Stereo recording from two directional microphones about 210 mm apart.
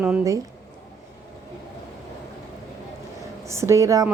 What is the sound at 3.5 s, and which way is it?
Speech, 15° right (ahead or behind).